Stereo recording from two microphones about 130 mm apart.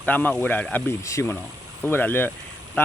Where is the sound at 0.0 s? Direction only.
15° left (ahead or behind).